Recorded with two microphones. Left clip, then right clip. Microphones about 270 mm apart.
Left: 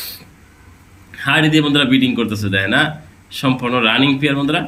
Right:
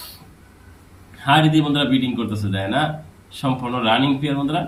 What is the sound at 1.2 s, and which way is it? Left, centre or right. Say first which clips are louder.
A man's voice: left 2 dB; left.